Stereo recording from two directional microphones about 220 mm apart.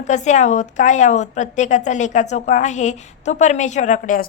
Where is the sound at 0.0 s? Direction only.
35° left (ahead or behind).